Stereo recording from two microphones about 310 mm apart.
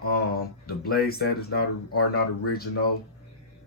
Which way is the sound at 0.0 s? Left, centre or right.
Left.